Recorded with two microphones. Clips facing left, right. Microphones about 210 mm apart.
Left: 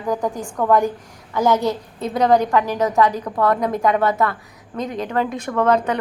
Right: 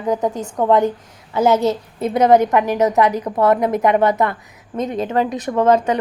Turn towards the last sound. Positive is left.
turn(degrees=-15)  # may be behind; listen again after turning